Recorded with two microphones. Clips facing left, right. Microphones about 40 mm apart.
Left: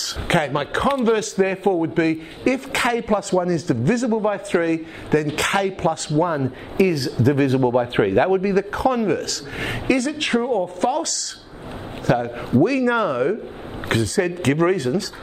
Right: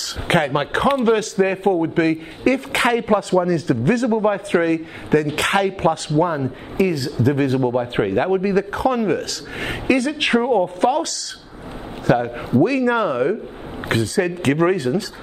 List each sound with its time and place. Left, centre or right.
0.3 s a man's voice: centre
8.4 s a man's voice: centre